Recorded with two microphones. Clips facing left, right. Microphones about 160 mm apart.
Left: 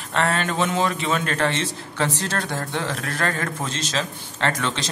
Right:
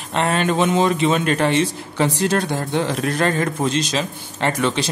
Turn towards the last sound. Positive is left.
turn(degrees=-15)  # may be behind; listen again after turning